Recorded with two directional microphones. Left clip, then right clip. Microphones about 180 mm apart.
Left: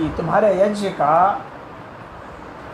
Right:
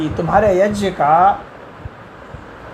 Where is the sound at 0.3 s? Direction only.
60° right (ahead or behind).